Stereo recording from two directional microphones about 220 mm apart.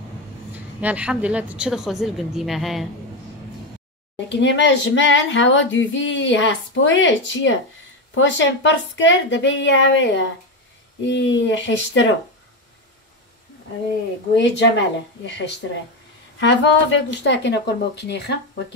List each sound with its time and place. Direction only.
0.7 s a woman's voice: 5° right (ahead or behind)
4.3 s speech: 55° left (ahead or behind)
14.3 s speech: 55° left (ahead or behind)